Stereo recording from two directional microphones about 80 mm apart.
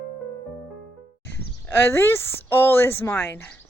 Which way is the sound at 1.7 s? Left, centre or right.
Left.